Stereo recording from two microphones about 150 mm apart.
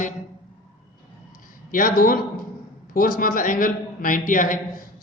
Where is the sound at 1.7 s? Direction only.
70° left (ahead or behind).